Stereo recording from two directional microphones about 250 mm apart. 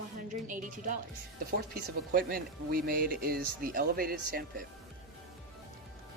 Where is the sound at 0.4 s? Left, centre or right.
Right.